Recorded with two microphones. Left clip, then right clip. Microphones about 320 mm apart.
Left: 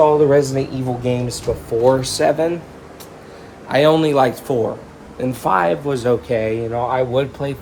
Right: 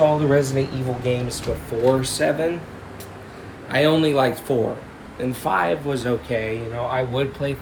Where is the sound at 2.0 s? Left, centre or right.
Centre.